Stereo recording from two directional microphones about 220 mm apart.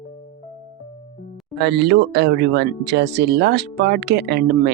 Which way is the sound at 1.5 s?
50° right (ahead or behind).